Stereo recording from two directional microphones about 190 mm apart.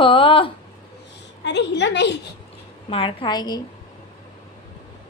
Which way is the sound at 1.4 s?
65° left (ahead or behind).